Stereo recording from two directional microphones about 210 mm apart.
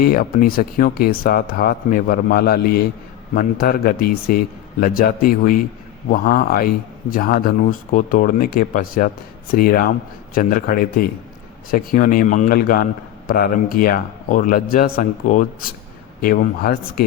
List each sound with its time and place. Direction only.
0.0 s a man's voice: 45° left (ahead or behind)